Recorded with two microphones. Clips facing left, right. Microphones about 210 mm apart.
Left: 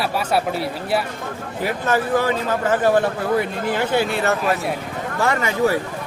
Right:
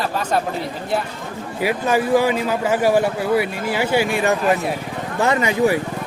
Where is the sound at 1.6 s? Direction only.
10° right (ahead or behind).